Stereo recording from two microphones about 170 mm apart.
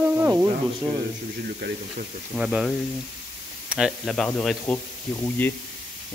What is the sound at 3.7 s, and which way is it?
Speech, centre (ahead or behind).